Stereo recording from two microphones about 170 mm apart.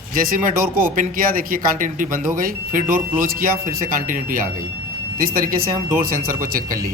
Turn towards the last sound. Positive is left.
turn(degrees=-55)  # may be behind; listen again after turning